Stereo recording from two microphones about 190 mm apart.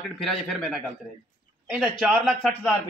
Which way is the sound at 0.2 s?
Centre (ahead or behind).